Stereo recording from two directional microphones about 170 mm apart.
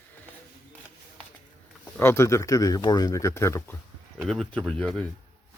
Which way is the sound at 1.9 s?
15° left (ahead or behind).